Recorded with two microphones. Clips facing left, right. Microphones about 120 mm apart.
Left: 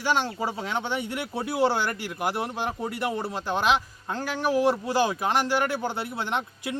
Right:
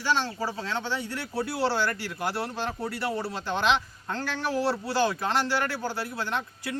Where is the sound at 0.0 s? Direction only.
15° left (ahead or behind).